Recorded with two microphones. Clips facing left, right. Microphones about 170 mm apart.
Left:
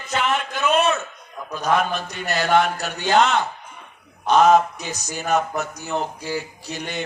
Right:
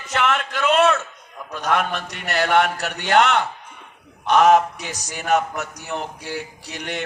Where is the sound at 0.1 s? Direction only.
75° right (ahead or behind).